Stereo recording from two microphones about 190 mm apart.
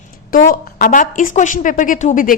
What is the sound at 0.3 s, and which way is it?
A woman's voice, 45° left (ahead or behind).